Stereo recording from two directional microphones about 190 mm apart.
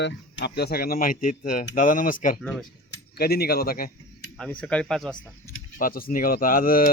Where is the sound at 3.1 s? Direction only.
55° left (ahead or behind).